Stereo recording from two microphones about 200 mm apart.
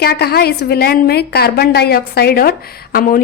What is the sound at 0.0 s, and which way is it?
A woman's voice, 50° left (ahead or behind).